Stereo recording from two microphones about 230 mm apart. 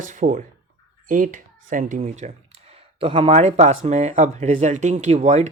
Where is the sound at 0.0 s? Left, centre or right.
Right.